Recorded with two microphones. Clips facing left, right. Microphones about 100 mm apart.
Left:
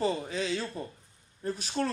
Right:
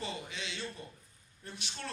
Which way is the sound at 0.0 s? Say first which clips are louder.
Left 11 dB; 40° left (ahead or behind).